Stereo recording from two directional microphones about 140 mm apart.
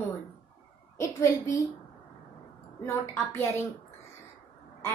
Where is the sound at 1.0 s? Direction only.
20° left (ahead or behind).